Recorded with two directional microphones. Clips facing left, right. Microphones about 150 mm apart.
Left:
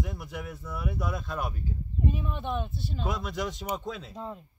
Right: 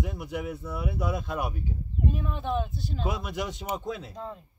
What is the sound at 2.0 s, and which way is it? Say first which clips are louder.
Speech: right 1 dB; centre (ahead or behind).